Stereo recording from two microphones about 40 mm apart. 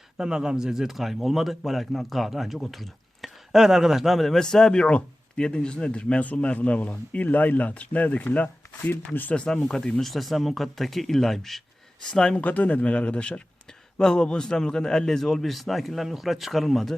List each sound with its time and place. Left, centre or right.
0.2 s a man's voice: centre
4.4 s speech: centre; by 8.4 s left
9.3 s speech: left
10.0 s a man's voice: centre
12.0 s speech: centre
12.4 s a man's voice: left; by 16.9 s centre